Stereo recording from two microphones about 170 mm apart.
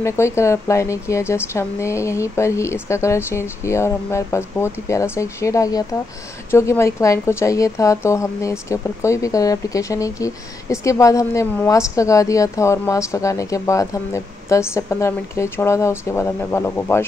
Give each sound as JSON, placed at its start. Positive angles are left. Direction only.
{"t": 0.0, "sound": "a woman's voice", "side_deg": 15}